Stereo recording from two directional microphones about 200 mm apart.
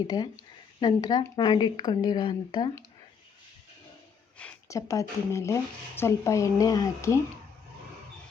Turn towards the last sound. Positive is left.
turn(degrees=15)  # may be behind; listen again after turning